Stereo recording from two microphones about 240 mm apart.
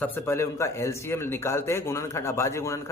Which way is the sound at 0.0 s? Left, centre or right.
Centre.